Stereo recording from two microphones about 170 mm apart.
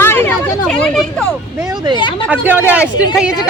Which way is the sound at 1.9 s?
30° left (ahead or behind).